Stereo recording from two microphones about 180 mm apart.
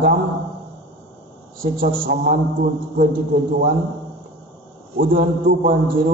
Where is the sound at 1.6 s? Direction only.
65° right (ahead or behind).